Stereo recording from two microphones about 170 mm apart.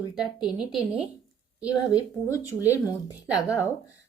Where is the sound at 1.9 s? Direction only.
20° left (ahead or behind).